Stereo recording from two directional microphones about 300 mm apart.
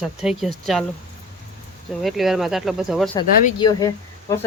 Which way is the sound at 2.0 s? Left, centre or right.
Centre.